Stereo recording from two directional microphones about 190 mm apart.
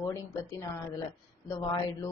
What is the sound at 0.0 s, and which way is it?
A woman's voice, 15° left (ahead or behind).